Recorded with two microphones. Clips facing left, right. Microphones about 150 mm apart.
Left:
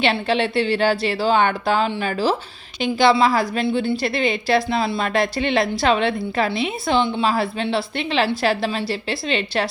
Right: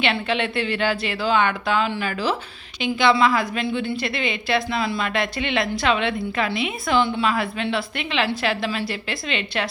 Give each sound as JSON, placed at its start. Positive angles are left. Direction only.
{"t": 0.0, "sound": "a woman's voice", "side_deg": 35}